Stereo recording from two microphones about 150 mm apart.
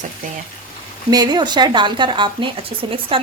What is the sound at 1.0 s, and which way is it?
A woman's voice, 25° right (ahead or behind).